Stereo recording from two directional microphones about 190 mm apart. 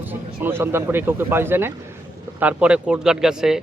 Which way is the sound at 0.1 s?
10° right (ahead or behind).